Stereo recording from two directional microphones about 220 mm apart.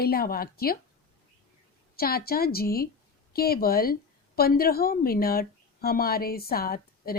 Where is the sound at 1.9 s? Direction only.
45° left (ahead or behind).